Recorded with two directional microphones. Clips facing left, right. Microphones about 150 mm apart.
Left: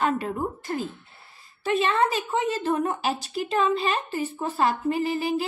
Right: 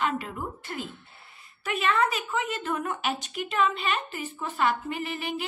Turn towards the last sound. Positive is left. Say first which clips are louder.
# left 7 dB
turn(degrees=35)  # may be behind; listen again after turning